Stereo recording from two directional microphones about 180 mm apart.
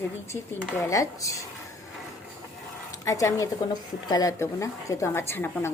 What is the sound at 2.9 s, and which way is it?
A woman's voice, 20° left (ahead or behind).